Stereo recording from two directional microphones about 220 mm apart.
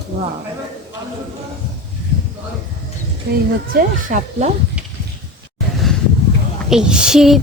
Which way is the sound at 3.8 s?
35° right (ahead or behind).